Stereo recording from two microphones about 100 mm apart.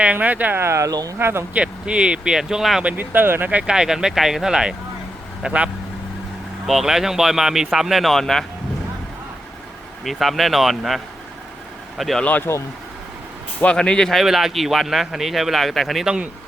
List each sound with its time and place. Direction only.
0.0 s speech: 15° right (ahead or behind); by 1.1 s 35° right (ahead or behind)
1.2 s speech: 25° right (ahead or behind)
1.5 s speech: 10° right (ahead or behind)
2.9 s speech: 20° right (ahead or behind); by 8.4 s 5° left (ahead or behind)
10.0 s speech: centre (ahead or behind)
12.2 s speech: 15° left (ahead or behind)
13.6 s speech: 10° left (ahead or behind); by 16.3 s 10° right (ahead or behind)